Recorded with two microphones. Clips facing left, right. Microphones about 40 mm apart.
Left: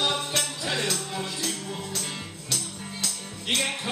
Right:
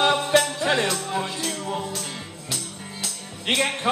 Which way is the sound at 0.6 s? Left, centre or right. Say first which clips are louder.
Right 7 dB; right.